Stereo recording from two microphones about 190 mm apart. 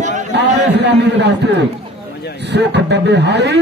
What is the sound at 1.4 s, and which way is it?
Chatter, 65° right (ahead or behind).